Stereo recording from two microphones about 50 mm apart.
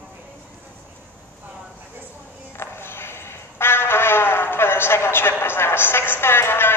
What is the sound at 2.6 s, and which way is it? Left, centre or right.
Music, left.